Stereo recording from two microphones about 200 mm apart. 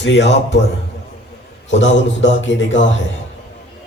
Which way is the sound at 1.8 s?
70° left (ahead or behind).